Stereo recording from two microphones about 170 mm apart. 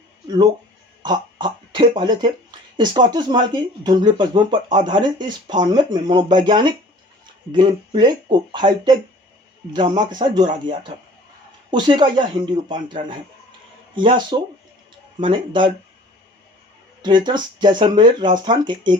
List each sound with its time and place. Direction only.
1.0 s speech: 25° right (ahead or behind)
17.0 s speech: 25° right (ahead or behind)